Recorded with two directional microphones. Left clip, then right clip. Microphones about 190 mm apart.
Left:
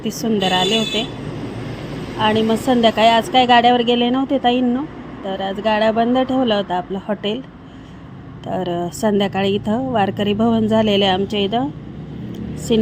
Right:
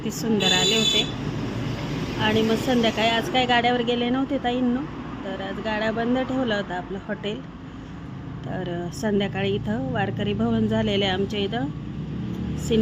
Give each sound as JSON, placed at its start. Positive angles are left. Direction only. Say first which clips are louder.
{"t": 0.2, "sound": "speech", "louder": "left 4 dB", "side_deg": 15}
{"t": 2.2, "sound": "a woman's voice", "louder": "left 6 dB", "side_deg": 20}
{"t": 8.4, "sound": "a woman's voice", "louder": "left 9 dB", "side_deg": 20}
{"t": 12.7, "sound": "speech", "louder": "left 6 dB", "side_deg": 15}